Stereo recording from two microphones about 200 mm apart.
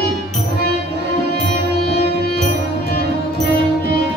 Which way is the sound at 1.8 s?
50° left (ahead or behind).